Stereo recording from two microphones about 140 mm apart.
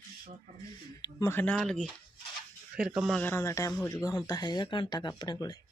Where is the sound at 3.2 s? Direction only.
15° left (ahead or behind).